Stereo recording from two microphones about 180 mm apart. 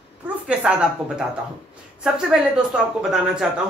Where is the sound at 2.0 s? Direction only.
5° right (ahead or behind).